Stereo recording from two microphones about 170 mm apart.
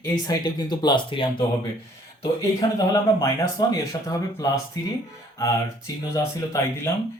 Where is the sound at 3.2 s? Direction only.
20° left (ahead or behind).